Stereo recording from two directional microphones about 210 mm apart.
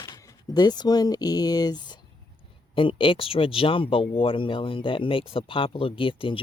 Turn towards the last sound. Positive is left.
turn(degrees=25)  # may be behind; listen again after turning